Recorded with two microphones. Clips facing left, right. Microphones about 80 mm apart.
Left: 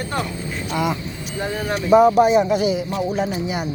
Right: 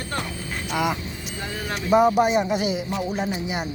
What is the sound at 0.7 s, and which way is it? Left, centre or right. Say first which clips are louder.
Speech: left 2 dB; centre.